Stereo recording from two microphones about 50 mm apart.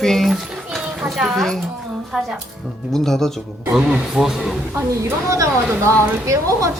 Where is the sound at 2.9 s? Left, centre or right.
Centre.